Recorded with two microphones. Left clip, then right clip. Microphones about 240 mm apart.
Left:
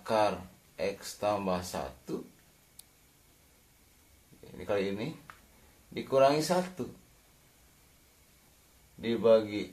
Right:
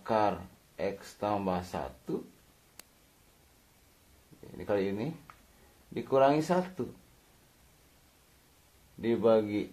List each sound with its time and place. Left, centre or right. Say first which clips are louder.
0.0 s a sound: left 1 dB; right
0.7 s speech: even; right
4.6 s speech: right 1 dB; right
9.0 s speech: left 1 dB; right